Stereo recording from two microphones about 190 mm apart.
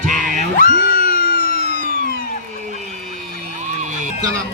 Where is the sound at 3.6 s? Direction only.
40° right (ahead or behind).